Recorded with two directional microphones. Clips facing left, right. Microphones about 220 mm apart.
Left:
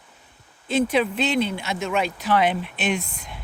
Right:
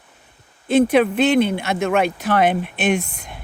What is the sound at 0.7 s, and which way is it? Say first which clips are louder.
Speech: right 6 dB; 55° right (ahead or behind).